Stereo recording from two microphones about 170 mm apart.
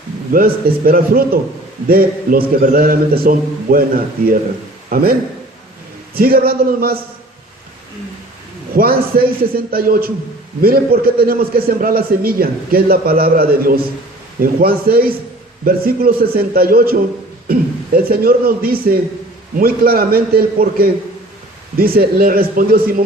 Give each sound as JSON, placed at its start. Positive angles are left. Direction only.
{"t": 0.3, "sound": "a man's voice", "side_deg": -60}
{"t": 6.1, "sound": "a man's voice", "side_deg": -60}
{"t": 8.7, "sound": "a man's voice", "side_deg": -60}